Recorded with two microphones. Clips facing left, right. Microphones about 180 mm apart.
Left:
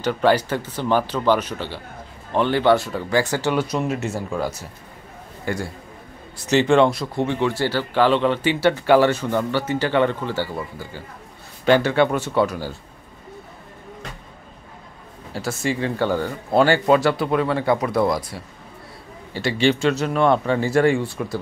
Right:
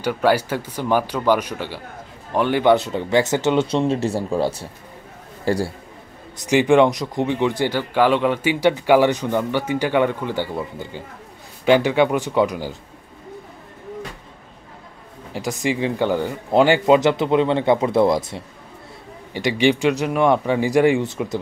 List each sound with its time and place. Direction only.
0.0 s a man's voice: 10° right (ahead or behind); by 5.7 s 35° right (ahead or behind)
6.3 s speech: 15° right (ahead or behind)
15.3 s speech: 15° right (ahead or behind)